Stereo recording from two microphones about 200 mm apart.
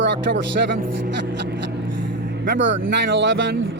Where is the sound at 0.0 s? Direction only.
65° right (ahead or behind).